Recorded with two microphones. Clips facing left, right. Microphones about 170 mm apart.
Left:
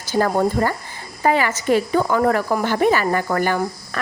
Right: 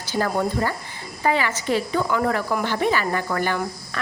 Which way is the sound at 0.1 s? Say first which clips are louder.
Left 5 dB; 45° left (ahead or behind).